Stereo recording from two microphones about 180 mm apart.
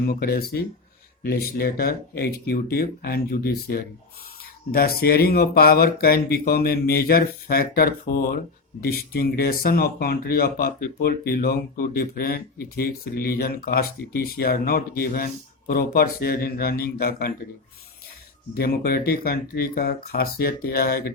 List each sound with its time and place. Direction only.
0.0 s speech: 55° left (ahead or behind)
18.5 s speech: 60° left (ahead or behind)